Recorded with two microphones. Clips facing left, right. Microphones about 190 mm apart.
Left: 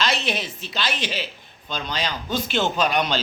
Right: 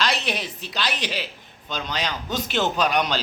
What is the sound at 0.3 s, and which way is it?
Speech, 15° right (ahead or behind).